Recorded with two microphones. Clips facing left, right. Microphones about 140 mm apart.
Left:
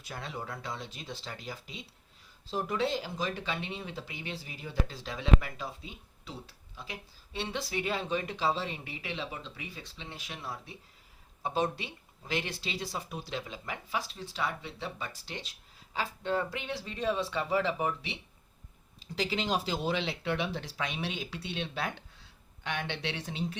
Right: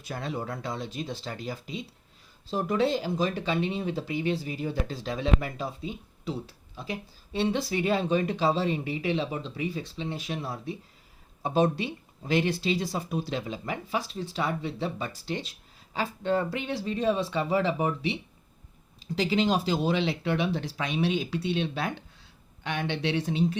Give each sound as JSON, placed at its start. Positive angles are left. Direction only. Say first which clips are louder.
{"t": 0.1, "sound": "speech", "louder": "right 6 dB", "side_deg": -45}
{"t": 7.3, "sound": "speech", "louder": "right 8 dB", "side_deg": -40}
{"t": 19.1, "sound": "speech", "louder": "right 6 dB", "side_deg": -40}